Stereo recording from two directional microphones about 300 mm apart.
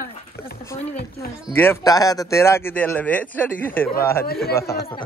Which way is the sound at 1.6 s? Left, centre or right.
Centre.